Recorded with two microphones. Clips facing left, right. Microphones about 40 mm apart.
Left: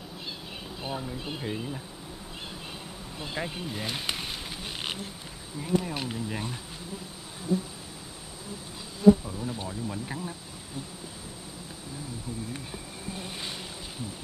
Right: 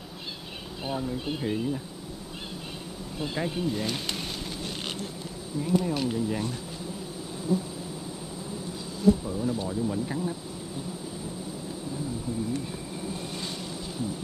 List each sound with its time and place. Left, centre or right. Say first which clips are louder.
0.8 s speech: right 4 dB; centre
3.2 s speech: right 4 dB; centre
5.6 s speech: right 3 dB; centre
9.7 s speech: right 5 dB; centre